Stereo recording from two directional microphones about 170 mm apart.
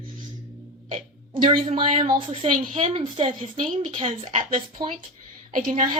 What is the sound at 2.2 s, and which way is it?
A woman's voice, 35° right (ahead or behind).